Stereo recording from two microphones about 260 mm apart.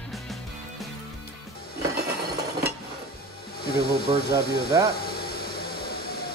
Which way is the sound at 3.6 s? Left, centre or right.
Left.